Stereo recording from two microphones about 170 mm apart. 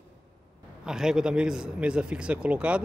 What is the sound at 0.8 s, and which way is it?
A man's voice, 5° right (ahead or behind).